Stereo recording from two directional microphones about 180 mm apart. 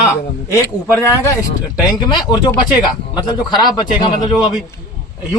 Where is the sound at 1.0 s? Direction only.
15° left (ahead or behind).